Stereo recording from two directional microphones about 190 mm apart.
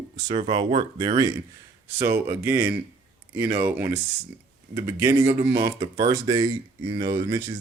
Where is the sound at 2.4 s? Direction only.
10° right (ahead or behind).